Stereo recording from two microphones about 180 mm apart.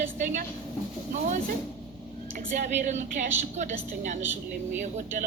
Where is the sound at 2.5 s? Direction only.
45° right (ahead or behind).